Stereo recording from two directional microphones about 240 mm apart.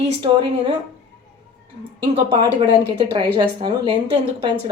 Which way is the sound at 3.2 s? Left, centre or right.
Centre.